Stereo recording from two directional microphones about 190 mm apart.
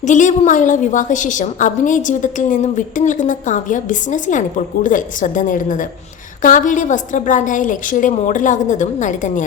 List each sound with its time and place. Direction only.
0.0 s a woman's voice: 40° left (ahead or behind)